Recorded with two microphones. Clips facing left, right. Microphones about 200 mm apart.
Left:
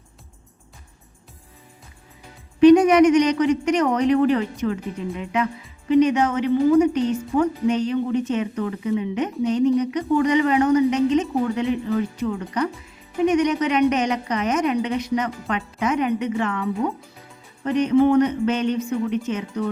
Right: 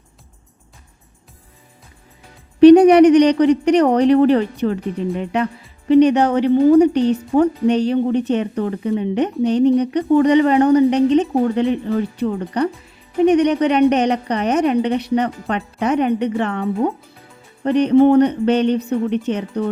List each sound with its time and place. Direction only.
2.6 s speech: 35° right (ahead or behind)
6.9 s a woman's voice: 65° right (ahead or behind)
7.2 s speech: 35° right (ahead or behind)